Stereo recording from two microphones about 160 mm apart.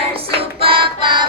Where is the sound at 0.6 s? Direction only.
35° right (ahead or behind).